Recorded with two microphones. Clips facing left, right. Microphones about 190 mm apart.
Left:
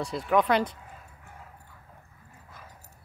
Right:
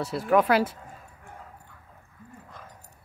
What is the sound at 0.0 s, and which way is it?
Speech, 5° right (ahead or behind).